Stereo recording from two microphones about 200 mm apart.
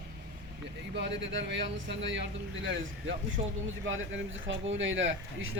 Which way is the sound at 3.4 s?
35° right (ahead or behind).